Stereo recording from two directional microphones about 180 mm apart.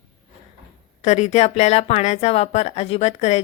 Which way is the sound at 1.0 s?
40° left (ahead or behind).